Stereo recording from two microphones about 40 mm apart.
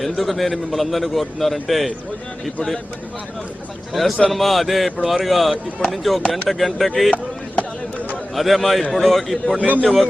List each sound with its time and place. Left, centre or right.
0.0 s a man's voice: centre
3.9 s a man's voice: centre
7.5 s a sound: left
8.4 s a man's voice: centre
9.6 s a man's voice: right